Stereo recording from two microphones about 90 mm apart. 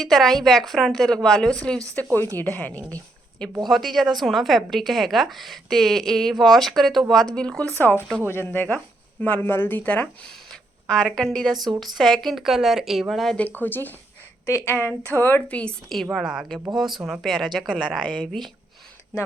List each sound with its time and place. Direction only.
0.0 s a woman's voice: centre (ahead or behind)
2.3 s a woman's voice: 20° left (ahead or behind)
2.9 s a sound: 10° left (ahead or behind)
3.6 s a woman's voice: centre (ahead or behind)
8.3 s a woman's voice: 25° left (ahead or behind); by 13.3 s centre (ahead or behind)
13.3 s a woman's voice: 15° left (ahead or behind)
14.4 s a woman's voice: 30° left (ahead or behind); by 15.7 s 15° left (ahead or behind)
16.1 s a woman's voice: 5° right (ahead or behind)